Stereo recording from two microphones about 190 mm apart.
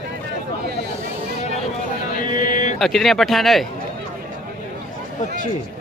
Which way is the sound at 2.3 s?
45° left (ahead or behind).